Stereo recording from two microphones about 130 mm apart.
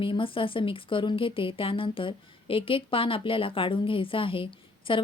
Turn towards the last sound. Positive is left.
turn(degrees=40)  # may be behind; listen again after turning